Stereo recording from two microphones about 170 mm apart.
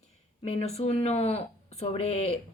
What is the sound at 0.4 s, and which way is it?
Speech, 40° left (ahead or behind).